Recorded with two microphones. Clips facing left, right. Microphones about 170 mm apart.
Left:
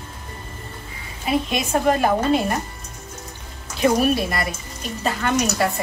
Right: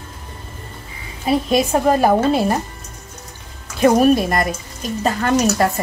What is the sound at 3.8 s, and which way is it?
A woman's voice, 45° right (ahead or behind).